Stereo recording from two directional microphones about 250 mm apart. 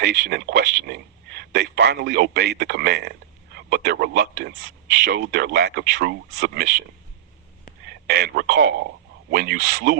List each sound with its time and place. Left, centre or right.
0.0 s a man's voice: right
7.9 s a man's voice: right